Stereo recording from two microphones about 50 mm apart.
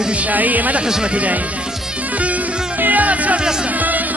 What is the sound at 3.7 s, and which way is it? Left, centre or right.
Music, right.